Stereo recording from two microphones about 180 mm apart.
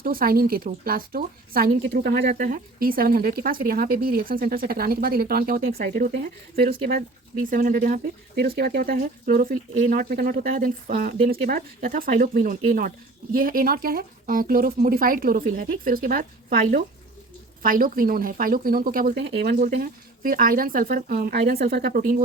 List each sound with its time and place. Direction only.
0.0 s speech: 55° right (ahead or behind)